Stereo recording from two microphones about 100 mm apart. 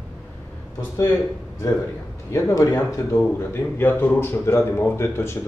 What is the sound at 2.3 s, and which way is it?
Speech, 35° left (ahead or behind).